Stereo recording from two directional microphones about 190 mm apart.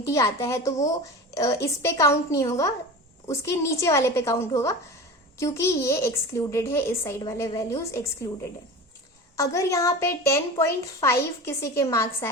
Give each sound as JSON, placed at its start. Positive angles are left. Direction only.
{"t": 0.0, "sound": "a woman's voice", "side_deg": 15}
{"t": 9.3, "sound": "a woman's voice", "side_deg": 15}